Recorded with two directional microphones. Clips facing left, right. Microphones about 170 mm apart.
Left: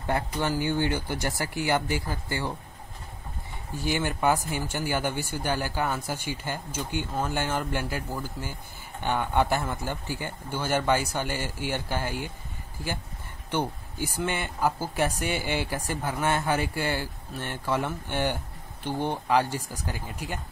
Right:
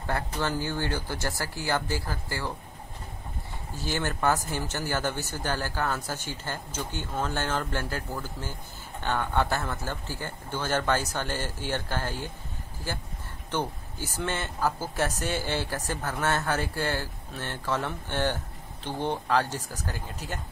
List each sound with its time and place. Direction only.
0.0 s speech: 15° left (ahead or behind)
3.7 s speech: 15° left (ahead or behind)
13.5 s speech: 15° left (ahead or behind)